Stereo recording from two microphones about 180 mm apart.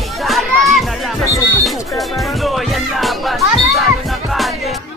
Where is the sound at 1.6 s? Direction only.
Centre (ahead or behind).